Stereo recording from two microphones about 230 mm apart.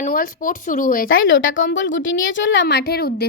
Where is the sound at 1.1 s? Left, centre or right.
Left.